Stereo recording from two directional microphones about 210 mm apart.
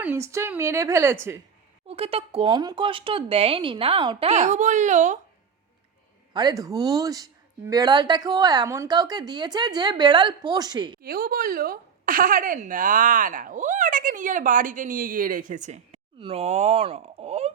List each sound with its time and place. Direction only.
0.0 s a woman's voice: 10° right (ahead or behind)
1.9 s a woman's voice: 25° right (ahead or behind)
6.3 s a woman's voice: 20° right (ahead or behind)
11.0 s a woman's voice: 45° right (ahead or behind)